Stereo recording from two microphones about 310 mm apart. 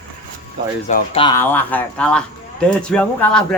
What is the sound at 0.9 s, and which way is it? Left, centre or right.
Speech, centre.